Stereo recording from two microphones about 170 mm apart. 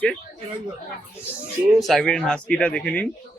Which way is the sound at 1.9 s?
Centre (ahead or behind).